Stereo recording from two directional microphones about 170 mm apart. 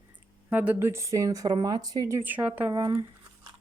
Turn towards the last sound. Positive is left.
turn(degrees=-20)  # may be behind; listen again after turning